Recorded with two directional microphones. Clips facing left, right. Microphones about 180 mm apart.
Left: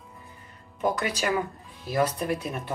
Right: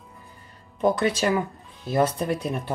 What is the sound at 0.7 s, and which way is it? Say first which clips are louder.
Speech: right 5 dB; 30° right (ahead or behind).